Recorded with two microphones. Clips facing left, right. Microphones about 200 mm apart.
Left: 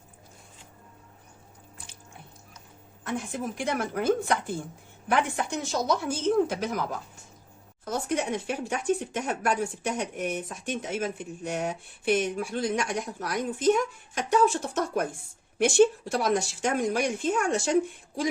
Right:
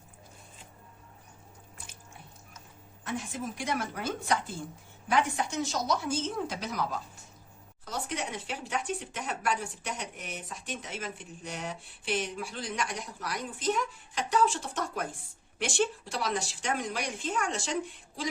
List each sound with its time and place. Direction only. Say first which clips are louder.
3.1 s speech: left 4 dB; 55° left (ahead or behind)
7.9 s speech: left 7 dB; 50° left (ahead or behind)
16.1 s speech: left 7 dB; 50° left (ahead or behind)